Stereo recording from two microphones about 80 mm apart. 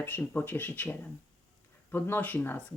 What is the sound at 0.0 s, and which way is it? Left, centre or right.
Speech, left.